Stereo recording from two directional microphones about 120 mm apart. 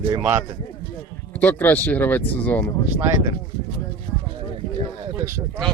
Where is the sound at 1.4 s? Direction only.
15° left (ahead or behind).